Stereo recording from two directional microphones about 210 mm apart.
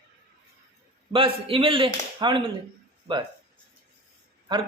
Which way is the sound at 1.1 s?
25° right (ahead or behind).